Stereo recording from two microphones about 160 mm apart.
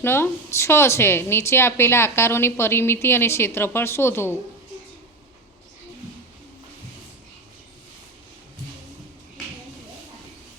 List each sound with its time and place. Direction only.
0.0 s a woman's voice: 15° left (ahead or behind)